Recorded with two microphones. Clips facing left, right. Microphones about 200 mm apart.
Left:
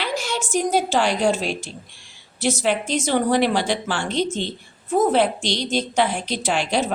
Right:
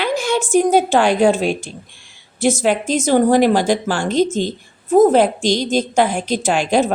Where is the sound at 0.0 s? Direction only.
55° right (ahead or behind).